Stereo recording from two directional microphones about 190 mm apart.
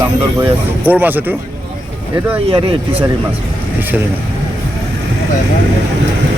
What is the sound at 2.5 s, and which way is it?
Speech, 30° right (ahead or behind).